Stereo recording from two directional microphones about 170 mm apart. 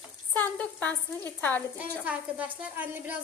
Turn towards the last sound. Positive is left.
turn(degrees=-10)  # may be behind; listen again after turning